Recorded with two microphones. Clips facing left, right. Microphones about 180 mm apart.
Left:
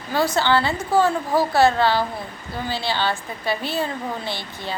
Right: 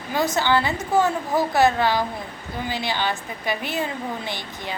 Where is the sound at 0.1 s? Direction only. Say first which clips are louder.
Left 1 dB; 20° right (ahead or behind).